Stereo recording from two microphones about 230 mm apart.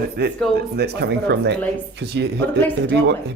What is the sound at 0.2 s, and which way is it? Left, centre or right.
Speech, right.